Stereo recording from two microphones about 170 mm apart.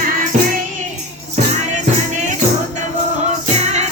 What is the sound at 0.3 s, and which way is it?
Music, 50° right (ahead or behind).